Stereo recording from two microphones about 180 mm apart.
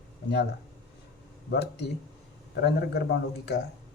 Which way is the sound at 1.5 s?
65° left (ahead or behind).